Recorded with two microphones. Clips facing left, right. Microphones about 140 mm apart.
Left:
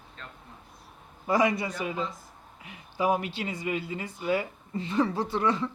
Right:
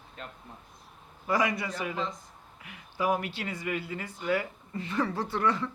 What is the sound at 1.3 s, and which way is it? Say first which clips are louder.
Speech: left 3 dB; 25° left (ahead or behind).